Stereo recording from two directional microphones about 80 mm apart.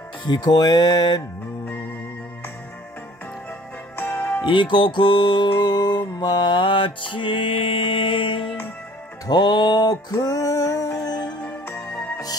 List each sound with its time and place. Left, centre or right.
0.2 s speech: left
3.9 s music: left
4.4 s music: left
9.3 s a sound: left
11.6 s music: left